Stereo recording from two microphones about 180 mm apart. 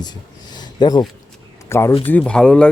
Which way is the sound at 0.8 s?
20° left (ahead or behind).